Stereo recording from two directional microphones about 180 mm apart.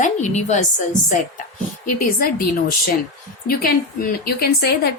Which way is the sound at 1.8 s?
50° left (ahead or behind).